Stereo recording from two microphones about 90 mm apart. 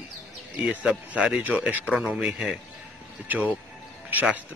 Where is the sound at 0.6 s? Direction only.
10° right (ahead or behind).